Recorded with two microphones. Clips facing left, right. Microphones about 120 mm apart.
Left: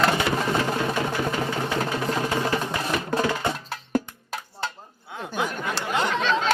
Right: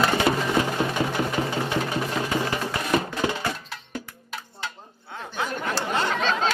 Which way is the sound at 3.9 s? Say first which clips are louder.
Left 11 dB; 45° left (ahead or behind).